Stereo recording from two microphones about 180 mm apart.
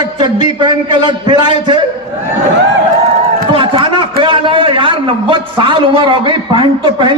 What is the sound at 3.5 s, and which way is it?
A man's voice, 30° right (ahead or behind).